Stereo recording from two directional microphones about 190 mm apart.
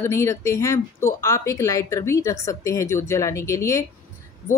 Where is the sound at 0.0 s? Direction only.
15° left (ahead or behind).